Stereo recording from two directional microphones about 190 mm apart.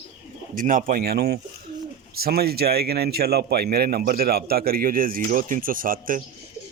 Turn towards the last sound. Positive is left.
turn(degrees=-45)  # may be behind; listen again after turning